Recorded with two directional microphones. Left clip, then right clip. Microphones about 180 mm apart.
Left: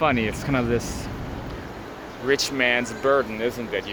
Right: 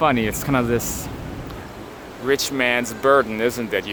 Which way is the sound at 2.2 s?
25° right (ahead or behind).